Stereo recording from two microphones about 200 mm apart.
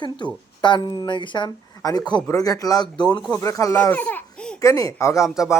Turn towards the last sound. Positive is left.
turn(degrees=15)  # may be behind; listen again after turning